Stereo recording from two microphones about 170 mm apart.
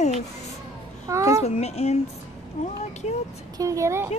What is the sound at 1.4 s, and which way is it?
Speech, 40° left (ahead or behind).